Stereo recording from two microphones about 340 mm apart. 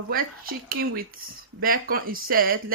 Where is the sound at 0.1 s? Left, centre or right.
Right.